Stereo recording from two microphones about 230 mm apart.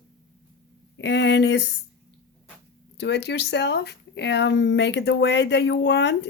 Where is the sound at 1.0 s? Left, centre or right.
Left.